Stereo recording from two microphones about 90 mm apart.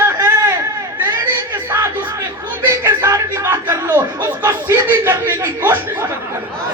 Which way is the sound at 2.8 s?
35° right (ahead or behind).